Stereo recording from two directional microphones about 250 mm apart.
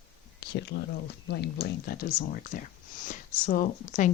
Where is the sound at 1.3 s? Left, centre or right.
Left.